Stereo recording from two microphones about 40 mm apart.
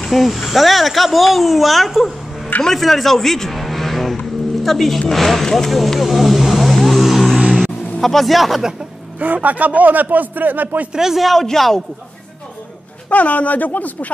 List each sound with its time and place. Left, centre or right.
0.1 s a man's voice: centre
9.2 s speech: right
10.9 s a man's voice: centre
11.1 s speech: centre
13.1 s speech: left